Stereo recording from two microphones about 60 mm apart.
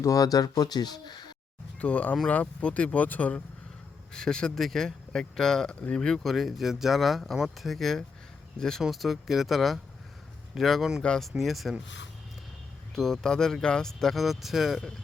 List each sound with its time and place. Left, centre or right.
0.0 s speech: left
1.8 s speech: left
4.1 s speech: centre
6.2 s speech: centre
8.8 s speech: centre
13.0 s speech: centre